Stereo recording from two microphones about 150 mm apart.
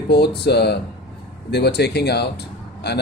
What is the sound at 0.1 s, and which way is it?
Speech, 90° left.